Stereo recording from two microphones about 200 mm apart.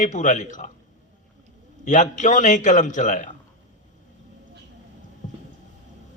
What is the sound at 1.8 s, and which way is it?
A man's voice, 40° left (ahead or behind).